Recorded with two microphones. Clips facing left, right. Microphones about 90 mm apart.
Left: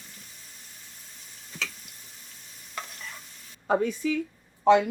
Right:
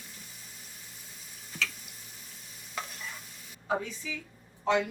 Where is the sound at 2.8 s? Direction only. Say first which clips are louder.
Even; 5° right (ahead or behind).